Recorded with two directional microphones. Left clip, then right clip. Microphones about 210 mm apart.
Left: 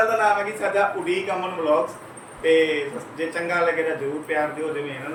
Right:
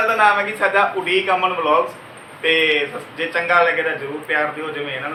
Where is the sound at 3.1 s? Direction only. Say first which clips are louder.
Right 7 dB; 5° left (ahead or behind).